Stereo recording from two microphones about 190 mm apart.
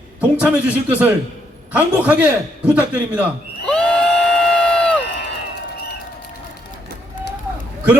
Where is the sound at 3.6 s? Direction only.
5° left (ahead or behind).